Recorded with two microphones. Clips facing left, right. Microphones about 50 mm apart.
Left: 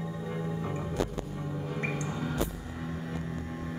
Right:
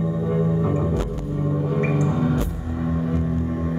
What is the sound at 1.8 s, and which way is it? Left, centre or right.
Music, centre.